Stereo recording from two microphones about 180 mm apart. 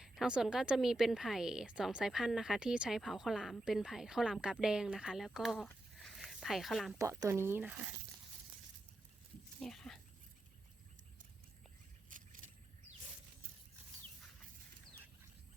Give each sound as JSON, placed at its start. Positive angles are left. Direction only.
{"t": 0.0, "sound": "a woman's voice", "side_deg": -5}
{"t": 7.0, "sound": "speech", "side_deg": -15}
{"t": 9.6, "sound": "speech", "side_deg": 0}
{"t": 12.1, "sound": "vehicle", "side_deg": -45}